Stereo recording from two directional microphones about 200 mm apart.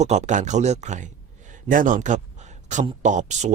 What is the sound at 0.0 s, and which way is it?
Speech, 35° right (ahead or behind).